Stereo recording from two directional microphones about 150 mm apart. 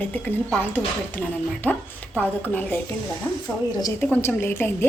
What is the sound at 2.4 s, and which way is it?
Speech, 10° left (ahead or behind).